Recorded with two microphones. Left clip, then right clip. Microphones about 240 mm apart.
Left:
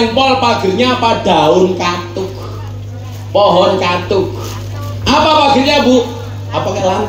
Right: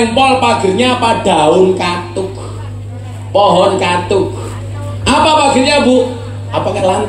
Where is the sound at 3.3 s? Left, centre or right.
Right.